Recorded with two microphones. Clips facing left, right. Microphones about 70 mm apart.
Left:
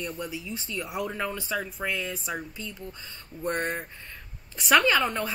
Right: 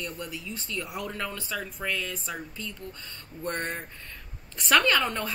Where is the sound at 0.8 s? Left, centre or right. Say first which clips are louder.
Left 3 dB; centre.